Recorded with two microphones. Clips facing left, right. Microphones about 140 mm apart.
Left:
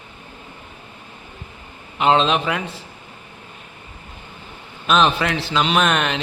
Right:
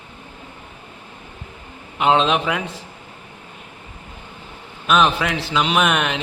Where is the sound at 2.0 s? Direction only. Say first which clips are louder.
Even; 10° right (ahead or behind).